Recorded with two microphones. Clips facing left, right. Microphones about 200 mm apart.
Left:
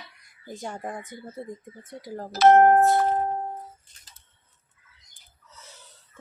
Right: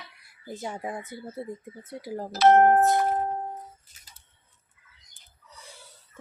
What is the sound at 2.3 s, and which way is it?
Speech, 50° left (ahead or behind).